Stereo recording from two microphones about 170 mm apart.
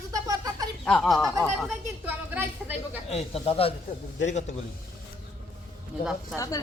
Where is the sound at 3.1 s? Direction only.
35° left (ahead or behind).